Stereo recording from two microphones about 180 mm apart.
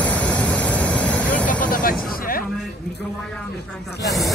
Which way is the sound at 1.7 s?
50° left (ahead or behind).